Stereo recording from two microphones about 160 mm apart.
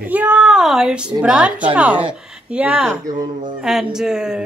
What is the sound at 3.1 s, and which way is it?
Speech, 30° right (ahead or behind).